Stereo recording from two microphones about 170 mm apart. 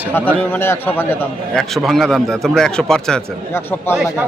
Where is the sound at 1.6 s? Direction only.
Centre (ahead or behind).